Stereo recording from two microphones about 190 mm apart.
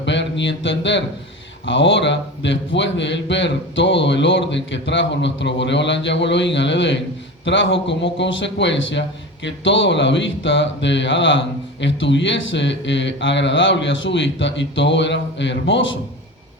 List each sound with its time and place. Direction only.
0.0 s mantra: 70° left (ahead or behind)
1.6 s a man's voice: 75° left (ahead or behind)